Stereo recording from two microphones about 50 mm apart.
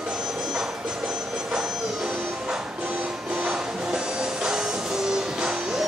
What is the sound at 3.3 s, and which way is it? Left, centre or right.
Music, right.